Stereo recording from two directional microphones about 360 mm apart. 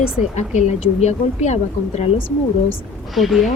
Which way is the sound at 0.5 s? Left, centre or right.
Centre.